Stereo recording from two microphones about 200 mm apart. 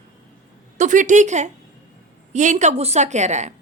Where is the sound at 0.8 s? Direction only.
40° right (ahead or behind).